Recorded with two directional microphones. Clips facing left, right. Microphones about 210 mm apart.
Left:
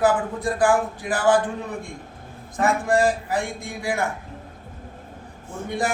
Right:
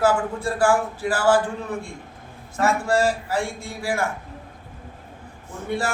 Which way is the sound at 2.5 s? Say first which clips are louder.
Even; 15° left (ahead or behind).